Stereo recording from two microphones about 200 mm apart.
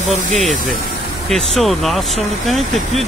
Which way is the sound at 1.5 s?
Centre (ahead or behind).